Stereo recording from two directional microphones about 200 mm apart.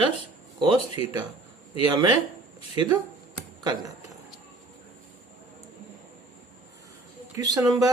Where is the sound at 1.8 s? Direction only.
20° right (ahead or behind).